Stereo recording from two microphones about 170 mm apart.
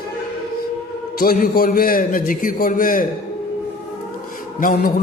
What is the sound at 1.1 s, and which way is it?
A man's voice, 55° left (ahead or behind).